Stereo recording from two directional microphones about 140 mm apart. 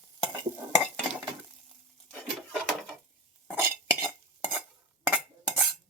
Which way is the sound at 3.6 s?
15° right (ahead or behind).